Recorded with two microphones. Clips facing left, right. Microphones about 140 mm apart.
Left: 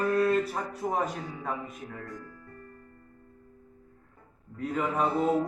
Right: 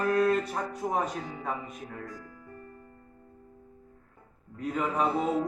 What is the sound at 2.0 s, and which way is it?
Speech, 90° right.